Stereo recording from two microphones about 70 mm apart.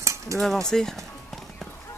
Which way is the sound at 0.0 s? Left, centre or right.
Right.